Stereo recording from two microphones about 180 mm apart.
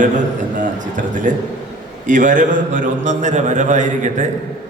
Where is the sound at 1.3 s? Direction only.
45° right (ahead or behind).